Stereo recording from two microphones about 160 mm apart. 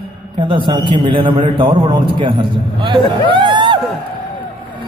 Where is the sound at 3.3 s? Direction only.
30° right (ahead or behind).